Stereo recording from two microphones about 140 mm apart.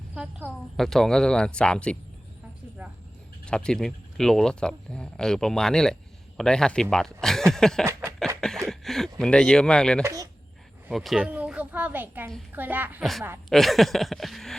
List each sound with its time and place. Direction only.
0.1 s a woman's voice: 10° right (ahead or behind)
0.4 s a woman's voice: 5° left (ahead or behind)
3.4 s speech: 5° left (ahead or behind)
6.9 s a sound: 5° left (ahead or behind)
8.6 s speech: 5° left (ahead or behind)
10.0 s speech: 25° right (ahead or behind)
10.8 s a woman's voice: centre (ahead or behind)
13.0 s a sound: centre (ahead or behind)